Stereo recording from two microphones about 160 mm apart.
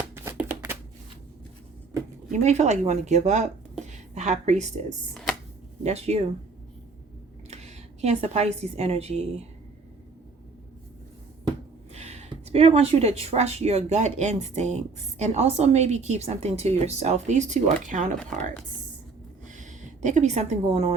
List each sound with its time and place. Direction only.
0.1 s shuffling cards: 15° right (ahead or behind)
2.4 s speech: 45° right (ahead or behind)
5.1 s a sound: centre (ahead or behind)
5.8 s speech: 40° right (ahead or behind)
7.5 s a woman's voice: 40° right (ahead or behind)
11.9 s speech: 40° right (ahead or behind)
19.5 s speech: 50° right (ahead or behind)